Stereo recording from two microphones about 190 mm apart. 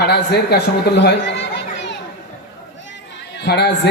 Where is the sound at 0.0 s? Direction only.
60° left (ahead or behind).